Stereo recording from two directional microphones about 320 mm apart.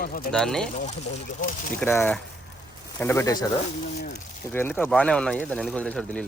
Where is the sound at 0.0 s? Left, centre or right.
Left.